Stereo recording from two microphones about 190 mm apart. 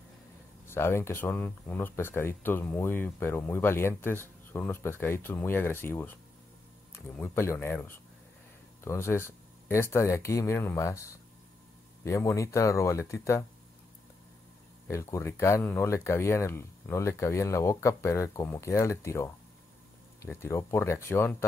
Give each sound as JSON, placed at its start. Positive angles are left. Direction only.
{"t": 0.7, "sound": "speech", "side_deg": 15}
{"t": 14.9, "sound": "speech", "side_deg": 15}